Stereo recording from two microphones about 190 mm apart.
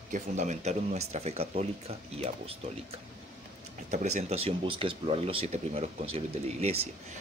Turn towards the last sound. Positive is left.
turn(degrees=-35)  # may be behind; listen again after turning